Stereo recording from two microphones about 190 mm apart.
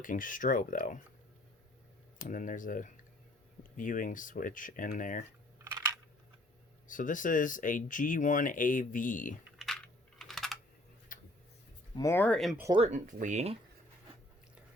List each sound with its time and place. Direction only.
0.0 s speech: 45° left (ahead or behind)
2.1 s speech: 45° left (ahead or behind)
5.5 s crushing: 15° right (ahead or behind)
6.8 s speech: 45° left (ahead or behind)
9.6 s coin: centre (ahead or behind)
11.1 s tick-tock: 45° left (ahead or behind)
11.9 s speech: 15° left (ahead or behind)
12.7 s speech: 30° right (ahead or behind)